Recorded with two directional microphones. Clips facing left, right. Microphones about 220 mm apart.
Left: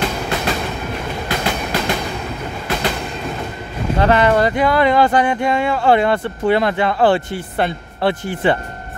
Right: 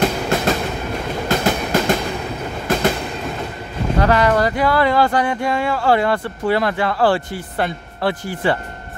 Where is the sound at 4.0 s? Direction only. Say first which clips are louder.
Left 2 dB; 25° left (ahead or behind).